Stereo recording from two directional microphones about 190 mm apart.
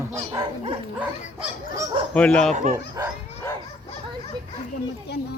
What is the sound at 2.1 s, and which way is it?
Speech, 5° left (ahead or behind).